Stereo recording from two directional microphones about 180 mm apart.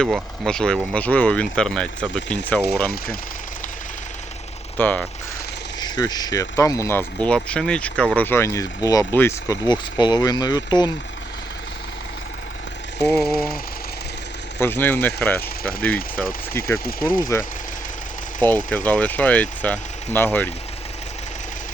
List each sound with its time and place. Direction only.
0.0 s speech: 5° left (ahead or behind)
4.8 s speech: 10° left (ahead or behind)
5.8 s speech: 20° left (ahead or behind)
7.3 s speech: 5° left (ahead or behind); by 10.9 s 25° left (ahead or behind)
13.0 s speech: 5° left (ahead or behind)
13.3 s speech: 55° left (ahead or behind)
14.6 s speech: 10° left (ahead or behind)